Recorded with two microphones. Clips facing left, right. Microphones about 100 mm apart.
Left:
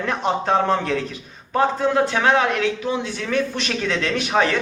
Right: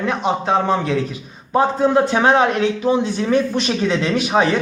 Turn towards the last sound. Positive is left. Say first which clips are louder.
# right 3 dB
turn(degrees=-15)  # may be behind; listen again after turning